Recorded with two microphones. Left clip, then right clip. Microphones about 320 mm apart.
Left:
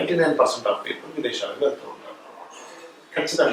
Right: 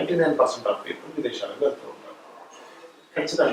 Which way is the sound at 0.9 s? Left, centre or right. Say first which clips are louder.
Left 2 dB; centre.